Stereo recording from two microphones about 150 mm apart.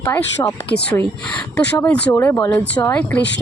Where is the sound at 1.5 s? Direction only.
15° left (ahead or behind).